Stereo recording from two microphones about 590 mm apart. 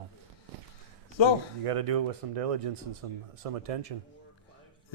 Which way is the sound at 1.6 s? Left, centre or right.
Right.